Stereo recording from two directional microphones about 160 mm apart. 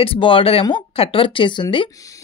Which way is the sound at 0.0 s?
35° left (ahead or behind).